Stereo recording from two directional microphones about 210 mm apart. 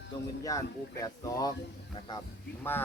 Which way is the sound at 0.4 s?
15° left (ahead or behind).